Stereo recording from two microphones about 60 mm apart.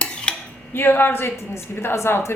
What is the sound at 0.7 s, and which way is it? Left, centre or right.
A woman's voice, left.